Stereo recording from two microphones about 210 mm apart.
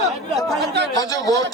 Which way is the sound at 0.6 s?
55° right (ahead or behind).